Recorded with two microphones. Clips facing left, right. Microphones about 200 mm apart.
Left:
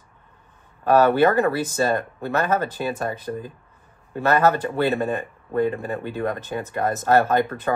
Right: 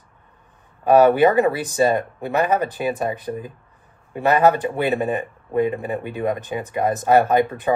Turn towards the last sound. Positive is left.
turn(degrees=-15)  # may be behind; listen again after turning